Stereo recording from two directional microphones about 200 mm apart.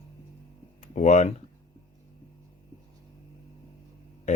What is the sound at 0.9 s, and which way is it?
Speech, 35° left (ahead or behind).